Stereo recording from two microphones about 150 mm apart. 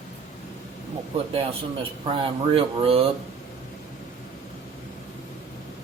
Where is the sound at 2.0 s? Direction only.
35° right (ahead or behind).